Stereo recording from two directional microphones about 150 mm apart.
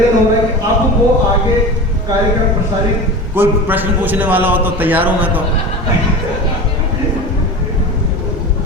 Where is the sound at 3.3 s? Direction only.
10° right (ahead or behind).